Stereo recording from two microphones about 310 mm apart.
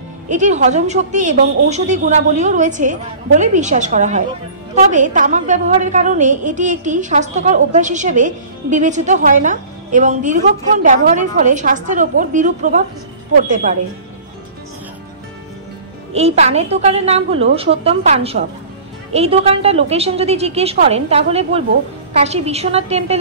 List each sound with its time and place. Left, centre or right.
0.3 s a woman's voice: right
16.1 s a woman's voice: centre